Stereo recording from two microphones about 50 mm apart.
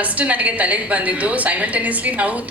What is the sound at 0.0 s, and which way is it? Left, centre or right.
A woman's voice, right.